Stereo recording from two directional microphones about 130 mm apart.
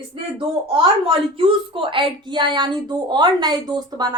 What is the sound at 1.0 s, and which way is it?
A woman's voice, 40° right (ahead or behind).